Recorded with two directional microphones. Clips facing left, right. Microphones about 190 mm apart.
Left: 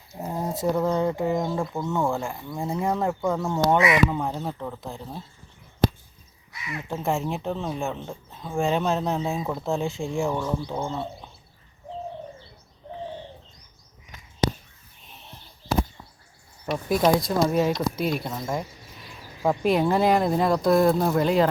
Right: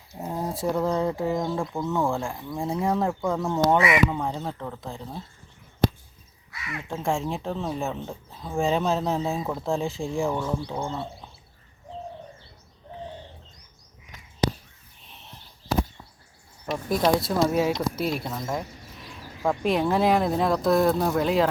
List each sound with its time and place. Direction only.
0.2 s a sound: centre (ahead or behind)
0.6 s speech: centre (ahead or behind)
3.8 s speech: 25° right (ahead or behind)
4.1 s speech: 5° left (ahead or behind)
6.7 s speech: 5° left (ahead or behind)
15.0 s a sound: centre (ahead or behind)
16.7 s speech: 5° left (ahead or behind)